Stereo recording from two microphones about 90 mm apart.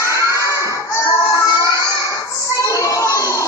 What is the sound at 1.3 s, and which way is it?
Children playing, 35° left (ahead or behind).